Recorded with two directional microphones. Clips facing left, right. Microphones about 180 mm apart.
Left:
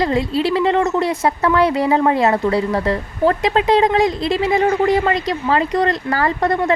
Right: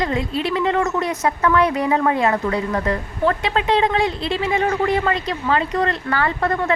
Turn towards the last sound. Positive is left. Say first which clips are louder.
# left 3 dB
turn(degrees=35)  # may be behind; listen again after turning